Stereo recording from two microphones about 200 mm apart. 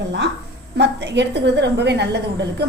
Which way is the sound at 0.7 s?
60° right (ahead or behind).